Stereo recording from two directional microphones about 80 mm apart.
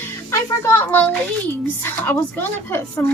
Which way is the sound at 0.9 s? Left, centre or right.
Left.